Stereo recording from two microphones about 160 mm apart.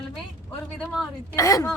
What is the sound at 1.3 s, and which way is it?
Speech, 20° left (ahead or behind).